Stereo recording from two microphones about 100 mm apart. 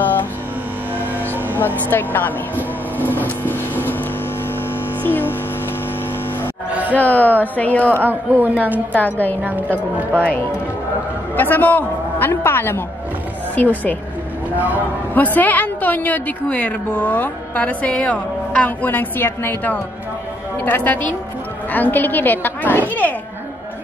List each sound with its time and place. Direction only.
0.0 s music: 20° left (ahead or behind)
1.9 s a man's voice: 20° left (ahead or behind)
3.1 s vehicle: 20° left (ahead or behind)
5.0 s a sound: 20° left (ahead or behind)
6.7 s speech: 15° right (ahead or behind)
7.0 s a woman's voice: 15° left (ahead or behind)
7.9 s speech: 20° right (ahead or behind)
8.9 s a woman's voice: 15° left (ahead or behind)
9.4 s speech: 20° right (ahead or behind)
11.3 s a man's voice: 20° left (ahead or behind)
15.1 s a woman's voice: 20° left (ahead or behind)